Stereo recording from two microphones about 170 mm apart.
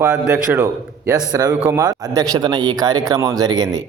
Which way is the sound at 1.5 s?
10° right (ahead or behind).